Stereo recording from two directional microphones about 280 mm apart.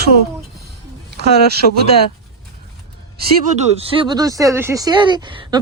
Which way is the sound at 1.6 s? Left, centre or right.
Left.